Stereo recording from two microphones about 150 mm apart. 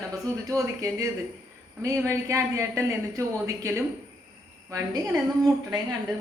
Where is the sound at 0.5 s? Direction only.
20° right (ahead or behind).